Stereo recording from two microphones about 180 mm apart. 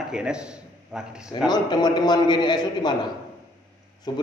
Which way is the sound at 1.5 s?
25° left (ahead or behind).